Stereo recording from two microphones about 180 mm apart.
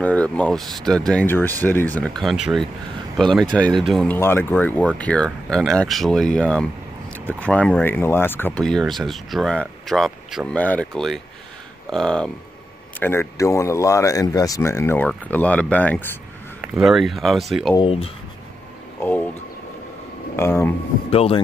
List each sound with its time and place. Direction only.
0.0 s speech: 10° left (ahead or behind)
16.6 s speech: 5° right (ahead or behind)
17.7 s speech: 30° left (ahead or behind)
18.9 s speech: 10° left (ahead or behind)
20.3 s speech: 15° left (ahead or behind)
21.1 s speech: 35° left (ahead or behind)